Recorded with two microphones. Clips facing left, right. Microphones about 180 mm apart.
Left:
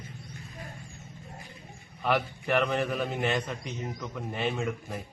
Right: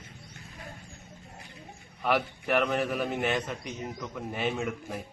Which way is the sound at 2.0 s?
Centre (ahead or behind).